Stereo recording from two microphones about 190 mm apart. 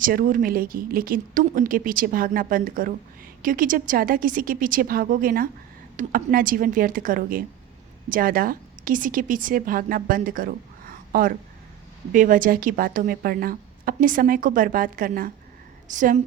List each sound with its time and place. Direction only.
0.0 s a woman's voice: 45° right (ahead or behind)